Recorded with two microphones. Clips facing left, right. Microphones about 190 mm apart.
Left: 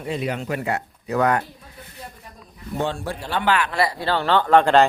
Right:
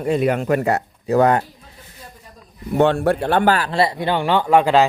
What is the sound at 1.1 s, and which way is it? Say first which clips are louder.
Speech: right 5 dB; 30° right (ahead or behind).